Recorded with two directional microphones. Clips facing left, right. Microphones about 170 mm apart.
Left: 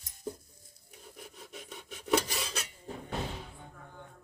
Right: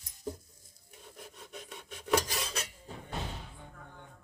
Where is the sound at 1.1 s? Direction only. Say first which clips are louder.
Even; centre (ahead or behind).